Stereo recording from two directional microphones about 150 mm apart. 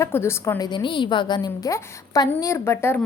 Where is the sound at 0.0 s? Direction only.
15° left (ahead or behind).